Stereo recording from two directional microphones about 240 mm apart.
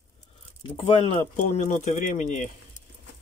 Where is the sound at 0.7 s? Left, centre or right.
Left.